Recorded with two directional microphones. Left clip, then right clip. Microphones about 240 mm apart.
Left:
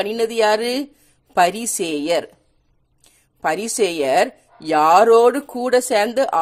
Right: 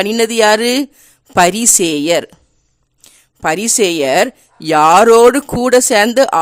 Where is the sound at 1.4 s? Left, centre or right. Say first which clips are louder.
Right 8 dB; right.